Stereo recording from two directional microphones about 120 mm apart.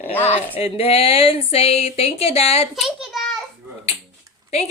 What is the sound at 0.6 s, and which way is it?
Speech, 55° left (ahead or behind).